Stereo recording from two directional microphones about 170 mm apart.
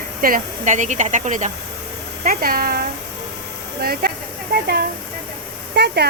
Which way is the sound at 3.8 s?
65° right (ahead or behind).